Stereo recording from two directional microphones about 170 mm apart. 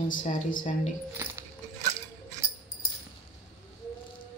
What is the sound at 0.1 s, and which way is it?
Speech, 50° left (ahead or behind).